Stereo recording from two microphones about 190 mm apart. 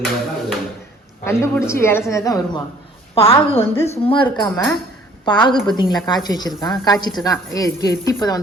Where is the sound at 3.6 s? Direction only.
10° left (ahead or behind).